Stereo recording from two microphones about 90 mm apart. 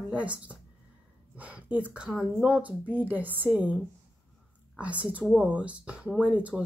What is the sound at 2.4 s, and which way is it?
A woman's voice, 15° right (ahead or behind).